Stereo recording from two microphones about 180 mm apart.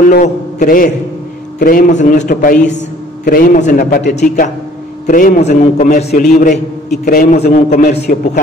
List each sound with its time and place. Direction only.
0.1 s a man's voice: 50° left (ahead or behind)